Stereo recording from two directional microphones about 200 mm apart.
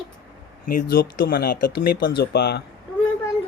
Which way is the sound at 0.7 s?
45° left (ahead or behind).